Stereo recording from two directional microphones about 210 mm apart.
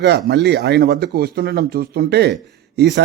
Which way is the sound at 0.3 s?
50° right (ahead or behind).